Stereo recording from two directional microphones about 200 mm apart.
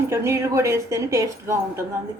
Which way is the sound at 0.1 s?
15° right (ahead or behind).